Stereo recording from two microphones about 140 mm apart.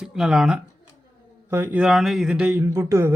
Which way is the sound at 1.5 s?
15° right (ahead or behind).